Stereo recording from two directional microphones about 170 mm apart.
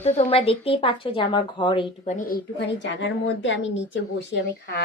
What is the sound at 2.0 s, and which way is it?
Speech, 45° left (ahead or behind).